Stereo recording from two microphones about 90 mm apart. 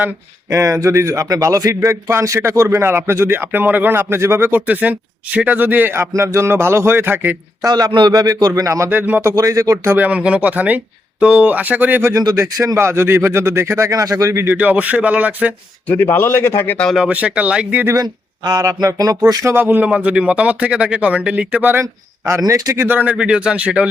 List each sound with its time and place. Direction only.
0.5 s a man's voice: 35° right (ahead or behind)
7.6 s speech: 50° right (ahead or behind)
8.6 s speech: 35° right (ahead or behind)
8.9 s a man's voice: 20° right (ahead or behind)
9.3 s speech: 35° right (ahead or behind)
10.0 s a man's voice: 15° right (ahead or behind)
12.1 s speech: 40° right (ahead or behind)
14.5 s a man's voice: 20° right (ahead or behind)
15.9 s a man's voice: 25° left (ahead or behind)
17.1 s a man's voice: 15° right (ahead or behind)
17.9 s speech: 45° right (ahead or behind)
19.5 s a man's voice: 20° right (ahead or behind)
22.4 s speech: 40° right (ahead or behind)
22.9 s a man's voice: 20° right (ahead or behind)